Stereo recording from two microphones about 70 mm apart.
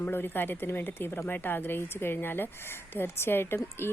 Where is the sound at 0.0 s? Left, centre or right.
Left.